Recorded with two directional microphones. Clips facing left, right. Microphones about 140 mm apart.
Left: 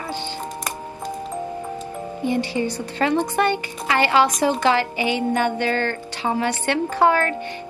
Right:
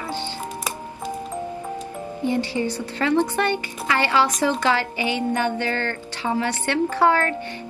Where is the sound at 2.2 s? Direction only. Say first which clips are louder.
Left 1 dB; 15° left (ahead or behind).